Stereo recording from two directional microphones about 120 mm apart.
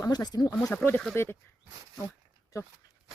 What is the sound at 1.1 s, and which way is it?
Speech, 20° left (ahead or behind).